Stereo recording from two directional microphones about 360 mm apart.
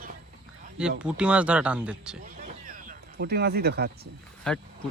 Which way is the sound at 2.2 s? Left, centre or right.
Right.